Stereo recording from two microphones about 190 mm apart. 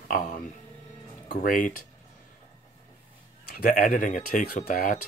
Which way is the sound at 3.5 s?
50° left (ahead or behind).